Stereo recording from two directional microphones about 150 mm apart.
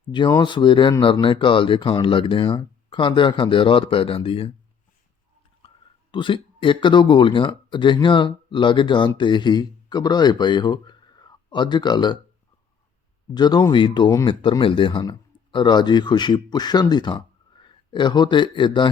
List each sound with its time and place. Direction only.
0.1 s speech: 25° left (ahead or behind)
5.6 s speech: 35° left (ahead or behind)
13.3 s speech: 25° left (ahead or behind)